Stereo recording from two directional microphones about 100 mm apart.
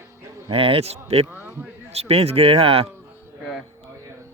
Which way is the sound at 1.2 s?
20° right (ahead or behind).